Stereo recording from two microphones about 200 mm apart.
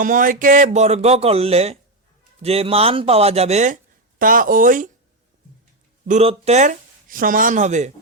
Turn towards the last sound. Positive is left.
turn(degrees=-35)  # may be behind; listen again after turning